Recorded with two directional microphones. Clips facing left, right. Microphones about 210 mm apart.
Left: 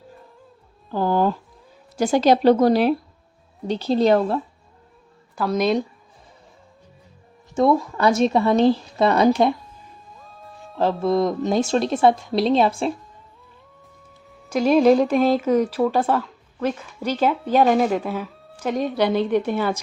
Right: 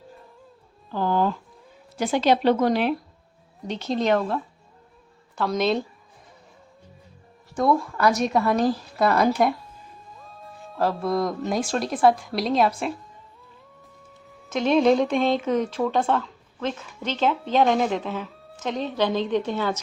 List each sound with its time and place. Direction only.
0.9 s music: 45° left (ahead or behind)
2.0 s speech: 40° left (ahead or behind)
5.4 s speech: 5° left (ahead or behind)
7.5 s speech: 25° left (ahead or behind)
10.2 s music: centre (ahead or behind)
10.8 s speech: 25° left (ahead or behind)
14.3 s speech: centre (ahead or behind)